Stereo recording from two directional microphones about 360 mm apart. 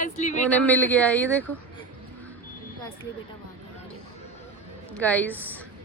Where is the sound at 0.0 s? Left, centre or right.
Centre.